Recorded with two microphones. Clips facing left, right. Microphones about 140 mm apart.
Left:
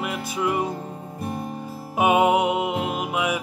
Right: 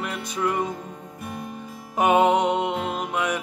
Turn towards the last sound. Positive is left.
turn(degrees=10)  # may be behind; listen again after turning